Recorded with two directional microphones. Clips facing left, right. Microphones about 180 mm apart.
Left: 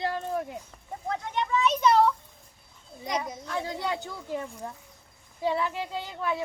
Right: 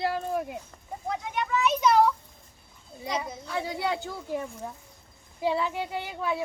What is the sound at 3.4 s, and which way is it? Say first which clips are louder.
A child's voice: right 1 dB; 15° right (ahead or behind).